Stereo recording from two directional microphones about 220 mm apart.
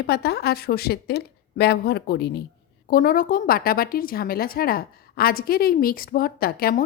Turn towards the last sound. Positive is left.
turn(degrees=45)  # may be behind; listen again after turning